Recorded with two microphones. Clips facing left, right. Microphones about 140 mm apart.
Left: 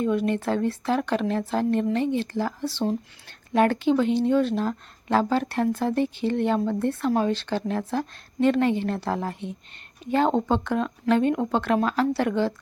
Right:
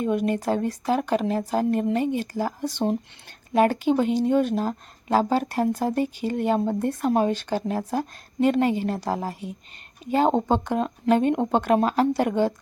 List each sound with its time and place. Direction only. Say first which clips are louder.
0.0 s speech: even; 15° right (ahead or behind)